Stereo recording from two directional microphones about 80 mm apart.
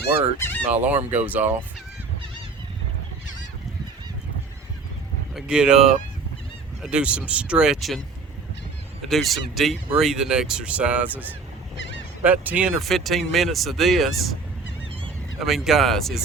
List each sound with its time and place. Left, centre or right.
0.3 s goose: left
0.7 s speech: centre
5.3 s speech: centre
9.0 s speech: centre
12.8 s speech: centre
15.4 s speech: centre